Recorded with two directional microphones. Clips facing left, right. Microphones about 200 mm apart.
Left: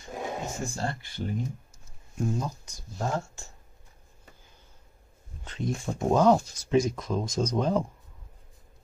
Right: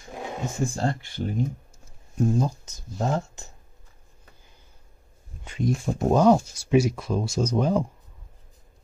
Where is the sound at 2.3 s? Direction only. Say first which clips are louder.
Right 7 dB; 25° right (ahead or behind).